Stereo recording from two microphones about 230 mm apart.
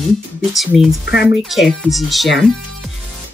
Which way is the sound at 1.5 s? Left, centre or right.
Centre.